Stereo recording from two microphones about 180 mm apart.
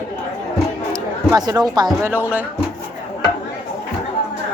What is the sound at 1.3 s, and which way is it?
Speech, 20° right (ahead or behind).